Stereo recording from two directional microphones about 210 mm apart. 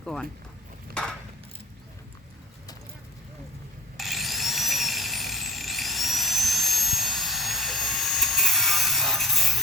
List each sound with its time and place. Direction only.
0.0 s speech: centre (ahead or behind)
3.9 s tools: centre (ahead or behind)